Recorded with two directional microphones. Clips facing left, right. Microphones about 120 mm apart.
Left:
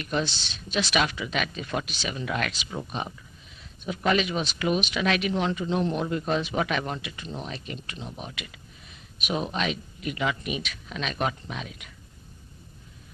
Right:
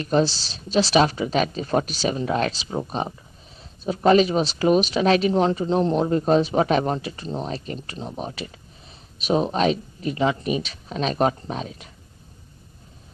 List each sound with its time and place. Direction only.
0.0 s speech: 35° right (ahead or behind)